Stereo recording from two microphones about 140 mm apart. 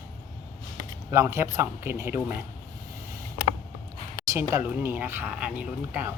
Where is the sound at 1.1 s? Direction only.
20° right (ahead or behind).